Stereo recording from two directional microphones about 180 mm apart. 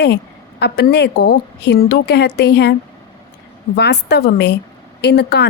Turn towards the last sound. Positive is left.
turn(degrees=65)  # may be behind; listen again after turning